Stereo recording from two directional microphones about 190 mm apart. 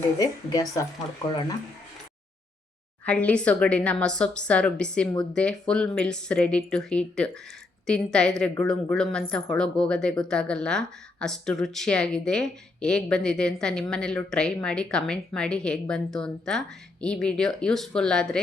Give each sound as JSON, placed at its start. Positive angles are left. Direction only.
{"t": 0.2, "sound": "speech", "side_deg": 20}
{"t": 3.0, "sound": "speech", "side_deg": 5}